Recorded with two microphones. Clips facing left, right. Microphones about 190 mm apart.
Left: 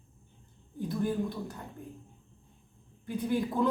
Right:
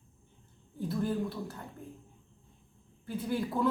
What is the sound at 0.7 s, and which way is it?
Speech, 15° left (ahead or behind).